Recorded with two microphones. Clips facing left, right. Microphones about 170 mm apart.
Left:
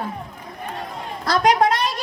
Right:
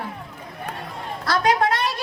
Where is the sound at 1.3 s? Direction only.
20° left (ahead or behind).